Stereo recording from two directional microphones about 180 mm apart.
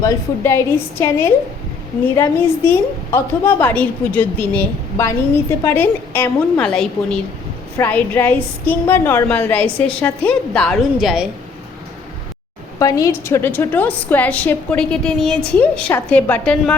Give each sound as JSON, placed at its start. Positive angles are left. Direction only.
{"t": 0.0, "sound": "a woman's voice", "side_deg": 15}
{"t": 2.6, "sound": "a woman's voice", "side_deg": 10}
{"t": 12.8, "sound": "a woman's voice", "side_deg": 15}